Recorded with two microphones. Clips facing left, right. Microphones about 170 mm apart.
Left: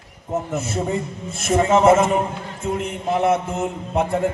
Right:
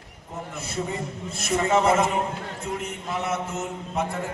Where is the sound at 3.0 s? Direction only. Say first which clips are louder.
Left 10 dB; 55° left (ahead or behind).